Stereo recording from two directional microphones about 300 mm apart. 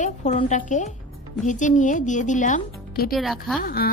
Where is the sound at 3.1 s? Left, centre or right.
Centre.